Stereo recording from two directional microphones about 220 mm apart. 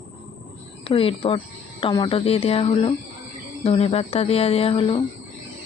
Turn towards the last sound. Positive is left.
turn(degrees=25)  # may be behind; listen again after turning